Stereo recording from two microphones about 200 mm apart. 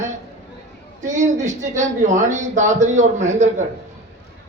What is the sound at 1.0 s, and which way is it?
Speech, 40° right (ahead or behind).